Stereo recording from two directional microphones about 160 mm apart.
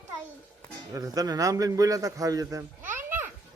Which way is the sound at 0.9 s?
20° right (ahead or behind).